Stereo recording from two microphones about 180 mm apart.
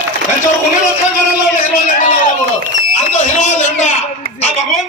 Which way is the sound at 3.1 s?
40° left (ahead or behind).